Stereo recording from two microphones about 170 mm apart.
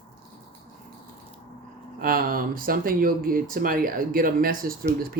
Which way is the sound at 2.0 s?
60° right (ahead or behind).